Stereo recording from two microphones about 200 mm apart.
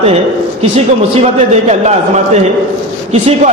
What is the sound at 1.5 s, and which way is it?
Speech, 35° right (ahead or behind).